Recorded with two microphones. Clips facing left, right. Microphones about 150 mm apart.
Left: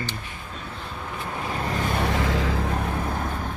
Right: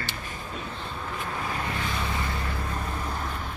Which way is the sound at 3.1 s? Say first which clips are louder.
Left 4 dB; 55° left (ahead or behind).